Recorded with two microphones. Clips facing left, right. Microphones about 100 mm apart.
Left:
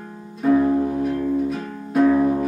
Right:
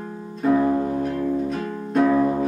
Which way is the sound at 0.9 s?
5° left (ahead or behind).